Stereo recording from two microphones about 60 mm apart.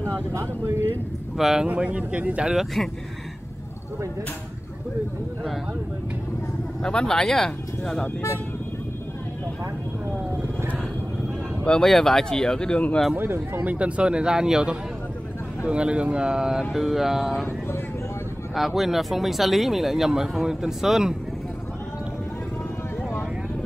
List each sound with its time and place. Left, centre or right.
0.0 s speech: right
1.3 s speech: centre
1.7 s a man's voice: right
2.5 s speech: centre
6.8 s speech: centre
11.6 s speech: centre
13.1 s speech: right
13.6 s speech: right; by 17.5 s centre
17.5 s speech: left
18.5 s speech: centre